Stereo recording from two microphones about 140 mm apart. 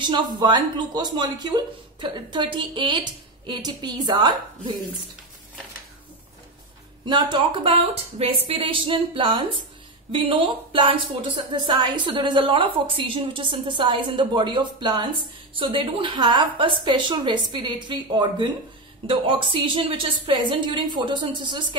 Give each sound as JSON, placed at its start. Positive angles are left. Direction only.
{"t": 0.0, "sound": "speech", "side_deg": -35}
{"t": 7.1, "sound": "speech", "side_deg": -35}